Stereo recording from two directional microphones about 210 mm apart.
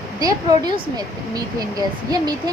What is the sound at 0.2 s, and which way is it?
Speech, 20° right (ahead or behind).